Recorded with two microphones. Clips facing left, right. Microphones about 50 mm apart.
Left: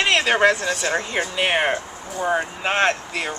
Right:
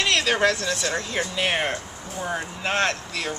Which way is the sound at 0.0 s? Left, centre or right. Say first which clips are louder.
Left 4 dB; left.